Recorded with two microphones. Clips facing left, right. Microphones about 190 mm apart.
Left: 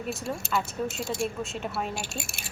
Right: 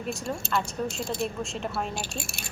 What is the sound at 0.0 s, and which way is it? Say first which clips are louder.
A woman's voice: right 1 dB; 5° left (ahead or behind).